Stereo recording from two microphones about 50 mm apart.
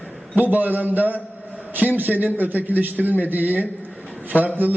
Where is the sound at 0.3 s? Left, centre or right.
Right.